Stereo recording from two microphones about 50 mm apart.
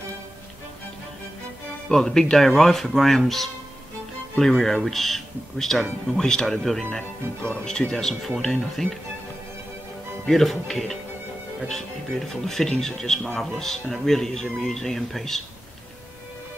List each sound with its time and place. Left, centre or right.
1.9 s a man's voice: centre
6.8 s a man's voice: centre
10.2 s speech: centre
12.2 s a man's voice: centre